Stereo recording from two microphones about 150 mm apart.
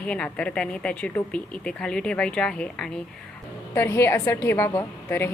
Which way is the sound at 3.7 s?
15° left (ahead or behind).